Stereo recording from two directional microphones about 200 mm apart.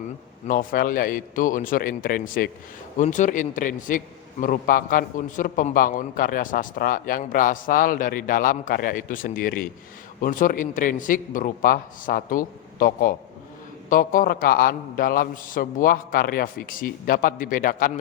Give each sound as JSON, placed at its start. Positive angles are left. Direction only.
{"t": 0.4, "sound": "a man's voice", "side_deg": 40}